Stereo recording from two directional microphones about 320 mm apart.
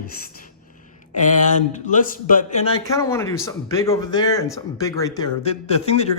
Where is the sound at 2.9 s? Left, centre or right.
Centre.